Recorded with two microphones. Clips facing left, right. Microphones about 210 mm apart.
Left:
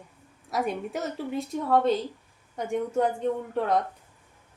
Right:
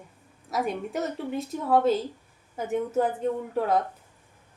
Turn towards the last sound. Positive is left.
turn(degrees=-5)  # may be behind; listen again after turning